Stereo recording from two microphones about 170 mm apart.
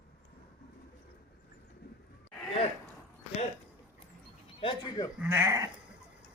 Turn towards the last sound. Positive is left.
turn(degrees=-20)  # may be behind; listen again after turning